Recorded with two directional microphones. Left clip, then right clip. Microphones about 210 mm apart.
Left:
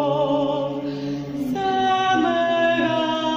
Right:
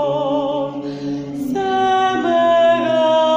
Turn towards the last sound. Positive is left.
turn(degrees=-25)  # may be behind; listen again after turning